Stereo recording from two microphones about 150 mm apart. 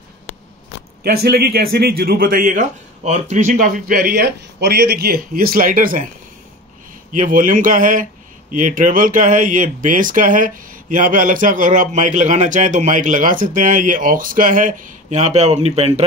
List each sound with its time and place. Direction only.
1.0 s a man's voice: 90° right; by 6.0 s 65° right (ahead or behind)
7.2 s speech: 65° right (ahead or behind); by 15.9 s 45° right (ahead or behind)